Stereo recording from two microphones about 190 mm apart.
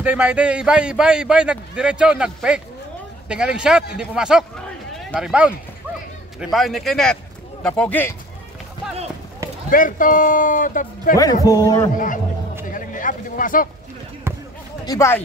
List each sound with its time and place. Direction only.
0.0 s a man's voice: 10° right (ahead or behind)
6.5 s a man's voice: centre (ahead or behind)
9.7 s a man's voice: 45° left (ahead or behind)
11.4 s a man's voice: 20° left (ahead or behind)
11.9 s a man's voice: 45° left (ahead or behind)
12.6 s a sound: 45° left (ahead or behind)
14.3 s basketball bounce: 15° right (ahead or behind)
14.9 s speech: 15° left (ahead or behind)